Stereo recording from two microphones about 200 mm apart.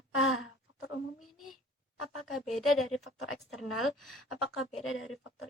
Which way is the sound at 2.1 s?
90° left.